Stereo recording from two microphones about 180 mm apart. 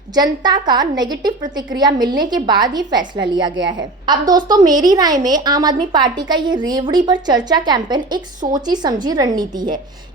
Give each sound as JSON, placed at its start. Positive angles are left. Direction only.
{"t": 0.1, "sound": "a woman's voice", "side_deg": -20}